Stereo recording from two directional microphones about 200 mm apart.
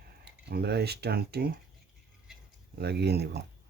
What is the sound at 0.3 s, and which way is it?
Speech, 55° right (ahead or behind).